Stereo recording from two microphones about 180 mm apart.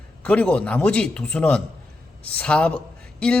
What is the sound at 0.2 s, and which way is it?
A man's voice, 5° left (ahead or behind).